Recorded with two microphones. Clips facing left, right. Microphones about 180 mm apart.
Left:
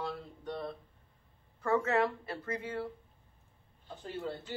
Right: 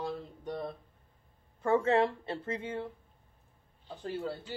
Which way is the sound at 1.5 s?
25° right (ahead or behind).